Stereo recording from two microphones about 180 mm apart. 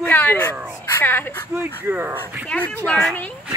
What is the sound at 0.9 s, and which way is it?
Speech, 10° left (ahead or behind).